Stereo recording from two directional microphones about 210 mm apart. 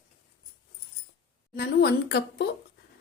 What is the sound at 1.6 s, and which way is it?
Speech, 50° left (ahead or behind).